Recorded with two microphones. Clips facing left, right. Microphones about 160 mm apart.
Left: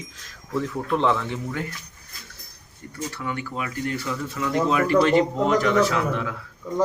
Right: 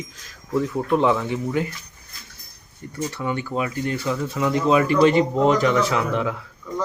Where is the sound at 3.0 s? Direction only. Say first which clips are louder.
Right 4 dB; 25° right (ahead or behind).